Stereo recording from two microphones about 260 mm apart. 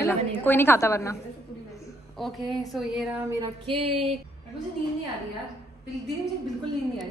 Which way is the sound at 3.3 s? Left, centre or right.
Centre.